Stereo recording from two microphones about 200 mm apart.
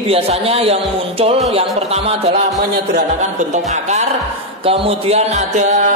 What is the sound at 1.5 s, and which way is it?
Music, 30° right (ahead or behind).